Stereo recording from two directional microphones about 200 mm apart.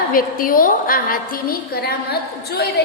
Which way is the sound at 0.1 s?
45° left (ahead or behind).